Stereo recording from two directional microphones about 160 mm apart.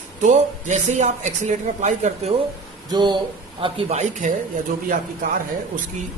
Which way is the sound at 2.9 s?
30° right (ahead or behind).